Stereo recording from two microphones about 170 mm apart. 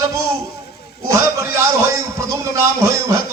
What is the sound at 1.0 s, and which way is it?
A man's voice, 15° right (ahead or behind).